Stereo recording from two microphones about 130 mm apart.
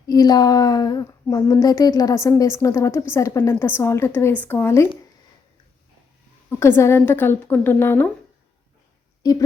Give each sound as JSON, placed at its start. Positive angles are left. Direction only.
{"t": 0.1, "sound": "speech", "side_deg": 30}
{"t": 6.6, "sound": "a woman's voice", "side_deg": 20}
{"t": 9.2, "sound": "speech", "side_deg": 30}